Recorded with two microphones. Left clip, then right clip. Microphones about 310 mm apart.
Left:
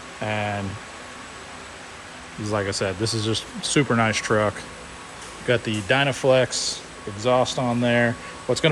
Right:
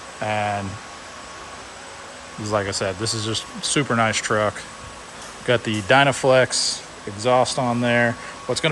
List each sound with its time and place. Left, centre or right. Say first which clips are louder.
0.2 s speech: right 3 dB; centre
2.4 s speech: right 2 dB; centre